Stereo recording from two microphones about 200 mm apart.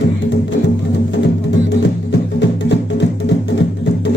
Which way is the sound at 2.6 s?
60° left (ahead or behind).